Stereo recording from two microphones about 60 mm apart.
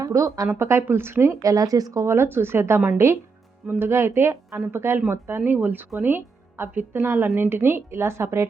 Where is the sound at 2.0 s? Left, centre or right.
Right.